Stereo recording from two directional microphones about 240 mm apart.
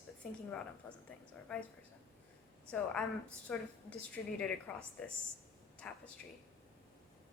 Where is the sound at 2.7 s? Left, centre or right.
Centre.